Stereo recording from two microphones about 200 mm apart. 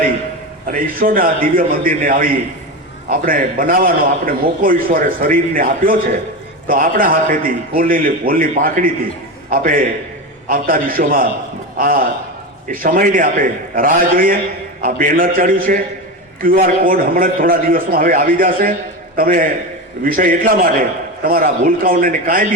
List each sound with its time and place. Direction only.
0.7 s a man's voice: 45° right (ahead or behind)